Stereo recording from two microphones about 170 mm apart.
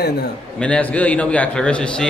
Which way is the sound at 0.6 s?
5° left (ahead or behind).